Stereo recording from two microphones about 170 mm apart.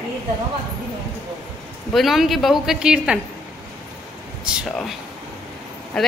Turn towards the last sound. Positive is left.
turn(degrees=5)  # may be behind; listen again after turning